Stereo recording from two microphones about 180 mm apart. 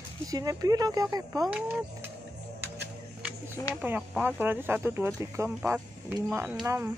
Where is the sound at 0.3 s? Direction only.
20° right (ahead or behind).